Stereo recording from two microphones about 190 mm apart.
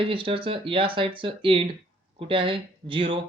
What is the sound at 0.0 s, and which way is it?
Speech, 30° right (ahead or behind).